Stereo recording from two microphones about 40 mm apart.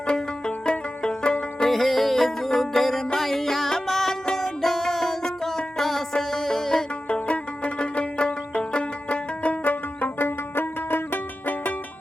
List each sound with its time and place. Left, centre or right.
0.1 s music: left
1.7 s music: centre
7.1 s music: left
10.2 s music: left